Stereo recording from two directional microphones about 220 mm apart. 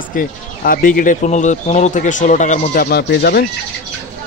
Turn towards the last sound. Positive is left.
turn(degrees=45)  # may be behind; listen again after turning